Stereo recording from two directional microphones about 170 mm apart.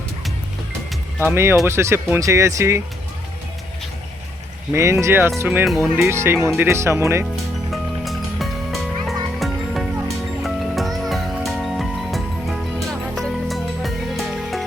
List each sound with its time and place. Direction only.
1.2 s speech: 15° right (ahead or behind)
4.7 s speech: 15° right (ahead or behind)
5.6 s speech: centre (ahead or behind)
6.1 s speech: 15° right (ahead or behind)
7.7 s music: centre (ahead or behind)